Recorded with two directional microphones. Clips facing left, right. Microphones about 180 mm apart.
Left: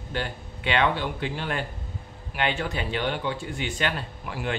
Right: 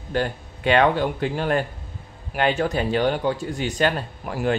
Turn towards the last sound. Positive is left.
turn(degrees=-45)  # may be behind; listen again after turning